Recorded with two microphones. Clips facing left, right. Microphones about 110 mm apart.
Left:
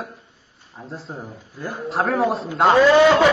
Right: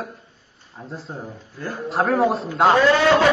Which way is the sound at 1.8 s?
Centre (ahead or behind).